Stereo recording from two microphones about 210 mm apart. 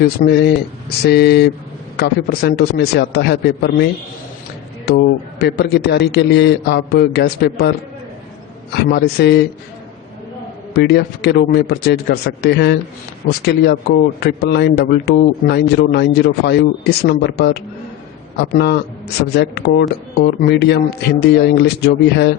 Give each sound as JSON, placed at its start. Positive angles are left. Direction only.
{"t": 0.0, "sound": "speech", "side_deg": 50}
{"t": 4.9, "sound": "speech", "side_deg": 50}
{"t": 8.7, "sound": "speech", "side_deg": 50}
{"t": 10.8, "sound": "speech", "side_deg": 50}